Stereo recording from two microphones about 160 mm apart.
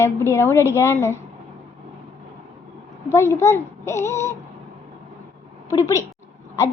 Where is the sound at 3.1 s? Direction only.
15° left (ahead or behind).